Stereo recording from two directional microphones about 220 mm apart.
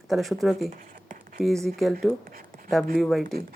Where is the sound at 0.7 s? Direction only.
35° right (ahead or behind).